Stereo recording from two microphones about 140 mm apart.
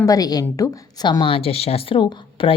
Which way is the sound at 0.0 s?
25° left (ahead or behind).